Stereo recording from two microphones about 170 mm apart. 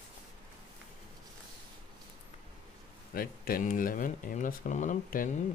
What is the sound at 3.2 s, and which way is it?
Speech, 60° left (ahead or behind).